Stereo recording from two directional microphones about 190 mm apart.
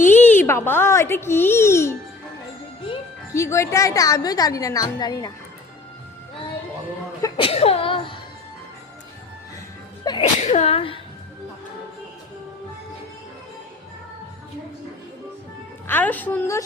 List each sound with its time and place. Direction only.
0.1 s a child's voice: 10° left (ahead or behind)
3.3 s a woman's voice: 15° left (ahead or behind)
7.2 s speech: 30° left (ahead or behind)
10.0 s speech: 20° left (ahead or behind)
10.4 s speech: 35° left (ahead or behind)
15.9 s a woman's voice: 10° left (ahead or behind)